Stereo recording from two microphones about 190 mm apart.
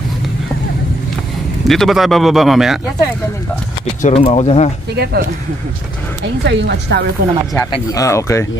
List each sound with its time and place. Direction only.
1.7 s speech: centre (ahead or behind)
4.0 s speech: 30° left (ahead or behind)
4.9 s speech: 55° right (ahead or behind)
6.4 s speech: 65° right (ahead or behind)
7.2 s speech: 50° right (ahead or behind)
7.9 s speech: 15° left (ahead or behind)